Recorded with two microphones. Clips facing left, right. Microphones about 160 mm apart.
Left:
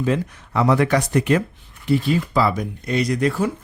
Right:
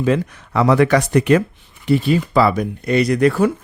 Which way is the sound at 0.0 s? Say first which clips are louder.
Right 4 dB; 90° right.